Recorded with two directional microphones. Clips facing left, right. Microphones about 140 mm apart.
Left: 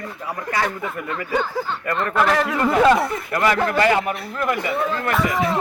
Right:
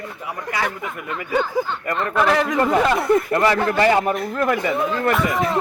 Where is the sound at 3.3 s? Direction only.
30° right (ahead or behind).